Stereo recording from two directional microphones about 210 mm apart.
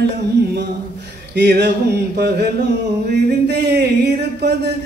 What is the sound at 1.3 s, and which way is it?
Speech, 55° right (ahead or behind).